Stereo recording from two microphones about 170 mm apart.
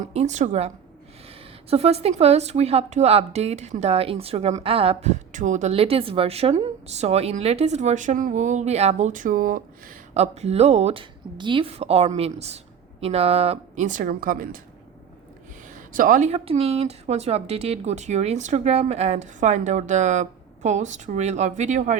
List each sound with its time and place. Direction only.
0.1 s a woman's voice: 40° right (ahead or behind)
1.7 s a woman's voice: 35° right (ahead or behind); by 10.0 s 55° right (ahead or behind)
10.2 s a woman's voice: 40° right (ahead or behind); by 14.6 s 55° right (ahead or behind)
15.7 s speech: 50° right (ahead or behind)